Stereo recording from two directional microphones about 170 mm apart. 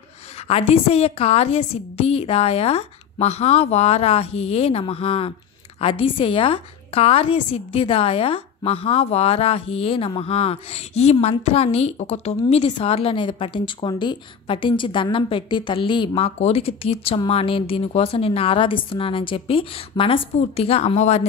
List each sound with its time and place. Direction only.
0.5 s a woman's voice: 35° left (ahead or behind)